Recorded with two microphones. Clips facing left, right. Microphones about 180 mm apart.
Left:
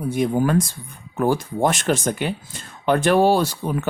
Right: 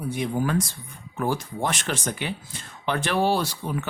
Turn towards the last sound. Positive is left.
turn(degrees=50)  # may be behind; listen again after turning